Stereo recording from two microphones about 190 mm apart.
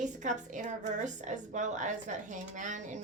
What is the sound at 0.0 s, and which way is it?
A woman's voice, 40° right (ahead or behind).